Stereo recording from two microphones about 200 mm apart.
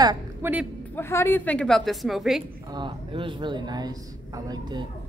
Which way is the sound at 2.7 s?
25° right (ahead or behind).